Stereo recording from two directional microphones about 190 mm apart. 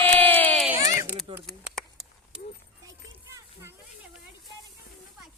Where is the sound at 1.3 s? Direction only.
25° right (ahead or behind).